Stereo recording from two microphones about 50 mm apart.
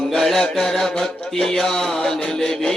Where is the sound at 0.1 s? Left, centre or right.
Centre.